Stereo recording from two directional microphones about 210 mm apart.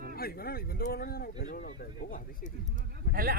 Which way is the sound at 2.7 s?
45° right (ahead or behind).